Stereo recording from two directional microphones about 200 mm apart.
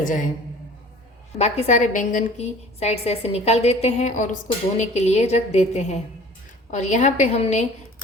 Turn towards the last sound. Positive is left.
turn(degrees=35)  # may be behind; listen again after turning